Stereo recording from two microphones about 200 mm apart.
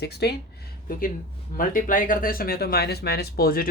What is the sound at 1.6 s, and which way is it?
Speech, 45° left (ahead or behind).